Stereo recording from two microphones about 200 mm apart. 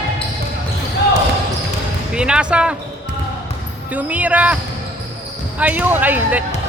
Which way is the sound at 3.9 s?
10° right (ahead or behind).